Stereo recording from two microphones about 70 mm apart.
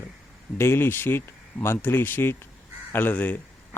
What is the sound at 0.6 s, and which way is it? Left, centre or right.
Speech, left.